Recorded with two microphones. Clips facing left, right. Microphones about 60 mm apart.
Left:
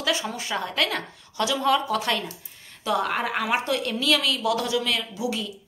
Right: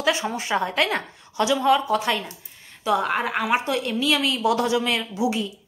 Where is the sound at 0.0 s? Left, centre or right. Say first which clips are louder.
Right 4 dB; right.